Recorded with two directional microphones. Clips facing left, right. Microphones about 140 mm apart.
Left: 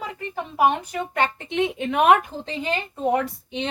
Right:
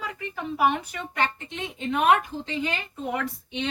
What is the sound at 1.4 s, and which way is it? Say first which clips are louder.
Speech: left 7 dB; 65° left (ahead or behind).